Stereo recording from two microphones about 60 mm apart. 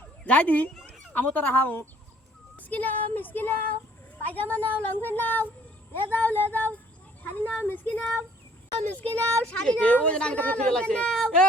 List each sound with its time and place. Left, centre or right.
0.3 s speech: left
2.6 s child singing: left
4.4 s speech: left